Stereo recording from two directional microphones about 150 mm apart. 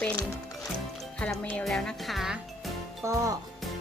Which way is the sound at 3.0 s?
20° right (ahead or behind).